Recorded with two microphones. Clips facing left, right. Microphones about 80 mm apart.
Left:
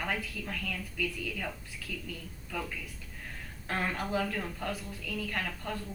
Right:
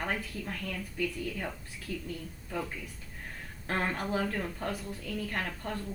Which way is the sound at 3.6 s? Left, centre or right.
Right.